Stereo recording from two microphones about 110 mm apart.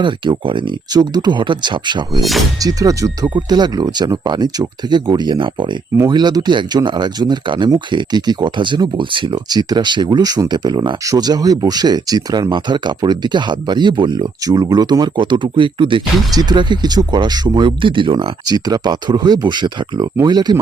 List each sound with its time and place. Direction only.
0.0 s speech: 45° right (ahead or behind)
2.6 s speech: 35° right (ahead or behind); by 16.0 s 50° right (ahead or behind)
16.3 s speech: 35° right (ahead or behind)
18.4 s speech: 35° right (ahead or behind)